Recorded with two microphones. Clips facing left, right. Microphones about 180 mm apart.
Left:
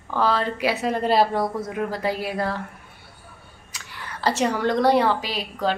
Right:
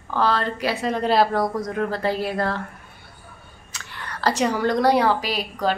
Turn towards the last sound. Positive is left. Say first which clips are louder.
# right 2 dB
turn(degrees=-5)  # may be behind; listen again after turning